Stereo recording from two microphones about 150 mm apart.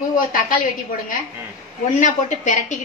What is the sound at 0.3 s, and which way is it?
Speech, 65° left (ahead or behind).